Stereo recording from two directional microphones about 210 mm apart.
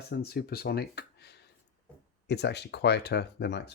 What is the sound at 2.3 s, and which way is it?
Speech, 55° left (ahead or behind).